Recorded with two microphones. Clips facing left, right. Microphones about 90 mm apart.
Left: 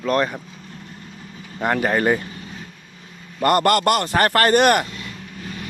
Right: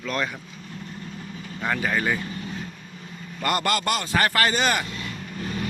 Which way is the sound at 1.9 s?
35° left (ahead or behind).